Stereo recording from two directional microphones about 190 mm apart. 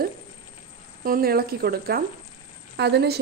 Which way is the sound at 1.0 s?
50° right (ahead or behind).